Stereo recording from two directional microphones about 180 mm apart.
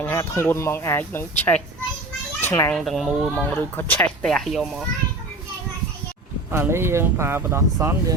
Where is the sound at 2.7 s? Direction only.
Centre (ahead or behind).